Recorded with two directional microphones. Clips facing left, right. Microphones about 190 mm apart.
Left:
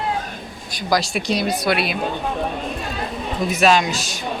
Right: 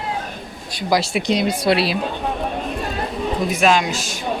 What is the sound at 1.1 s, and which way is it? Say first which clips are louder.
Speech: right 2 dB; 20° right (ahead or behind).